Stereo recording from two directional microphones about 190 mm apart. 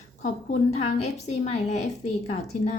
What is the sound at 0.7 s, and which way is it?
A woman's voice, 35° left (ahead or behind).